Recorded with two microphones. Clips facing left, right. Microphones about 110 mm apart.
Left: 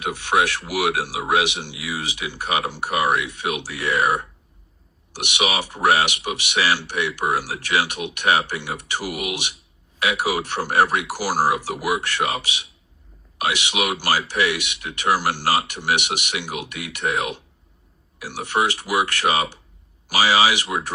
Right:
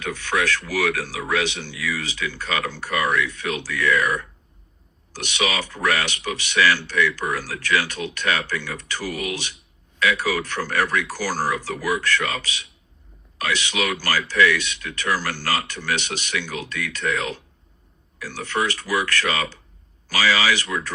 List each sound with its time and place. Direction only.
0.0 s speech: 20° left (ahead or behind)